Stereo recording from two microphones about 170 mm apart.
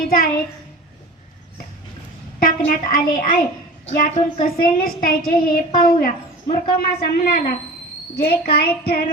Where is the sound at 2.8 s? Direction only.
55° left (ahead or behind).